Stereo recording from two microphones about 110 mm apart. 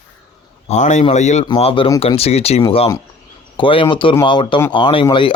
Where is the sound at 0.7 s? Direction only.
90° left.